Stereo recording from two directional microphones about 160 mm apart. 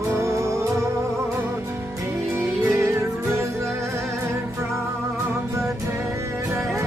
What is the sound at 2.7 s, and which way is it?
Music, 15° right (ahead or behind).